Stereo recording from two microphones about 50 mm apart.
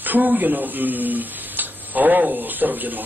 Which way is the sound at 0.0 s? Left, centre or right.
Right.